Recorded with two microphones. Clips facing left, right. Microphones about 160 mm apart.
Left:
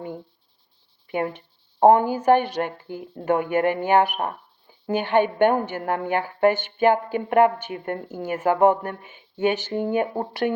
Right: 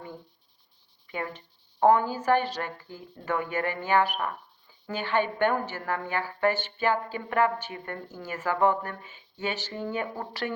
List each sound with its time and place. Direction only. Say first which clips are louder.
1.8 s a woman's voice: left 6 dB; 55° left (ahead or behind)